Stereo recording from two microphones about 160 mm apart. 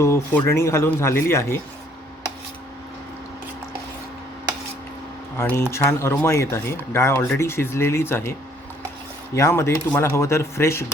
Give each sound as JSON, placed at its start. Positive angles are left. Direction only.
{"t": 0.0, "sound": "speech", "side_deg": 15}
{"t": 5.4, "sound": "speech", "side_deg": 15}